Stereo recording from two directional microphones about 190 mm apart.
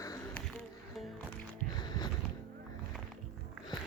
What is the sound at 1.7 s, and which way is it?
Music, 20° left (ahead or behind).